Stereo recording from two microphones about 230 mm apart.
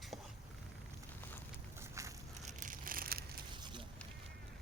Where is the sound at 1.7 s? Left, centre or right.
Centre.